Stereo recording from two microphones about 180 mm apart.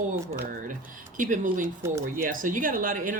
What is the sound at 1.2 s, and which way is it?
Speech, 45° right (ahead or behind).